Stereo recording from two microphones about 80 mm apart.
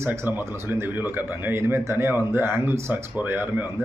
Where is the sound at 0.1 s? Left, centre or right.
Right.